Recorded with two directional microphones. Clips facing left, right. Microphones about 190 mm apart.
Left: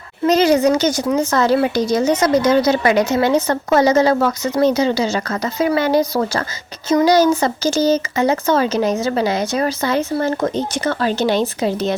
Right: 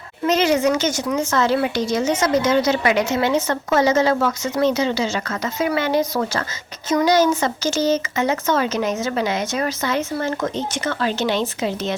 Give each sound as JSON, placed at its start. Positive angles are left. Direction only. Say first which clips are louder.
{"t": 0.3, "sound": "a woman's voice", "louder": "left 4 dB", "side_deg": 35}